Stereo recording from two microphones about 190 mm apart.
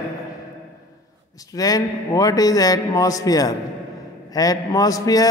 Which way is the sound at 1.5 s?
20° left (ahead or behind).